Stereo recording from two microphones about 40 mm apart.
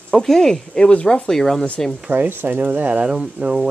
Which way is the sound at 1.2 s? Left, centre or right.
Centre.